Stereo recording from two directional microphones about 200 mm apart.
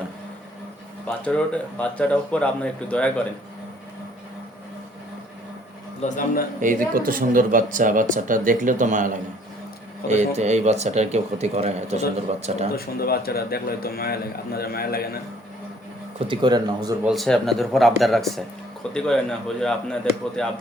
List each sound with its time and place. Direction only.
1.0 s speech: 5° left (ahead or behind)
6.0 s speech: 40° left (ahead or behind)
6.6 s speech: 40° right (ahead or behind)
12.7 s a man's voice: 50° left (ahead or behind)
16.2 s speech: 25° right (ahead or behind)
17.0 s speech: centre (ahead or behind)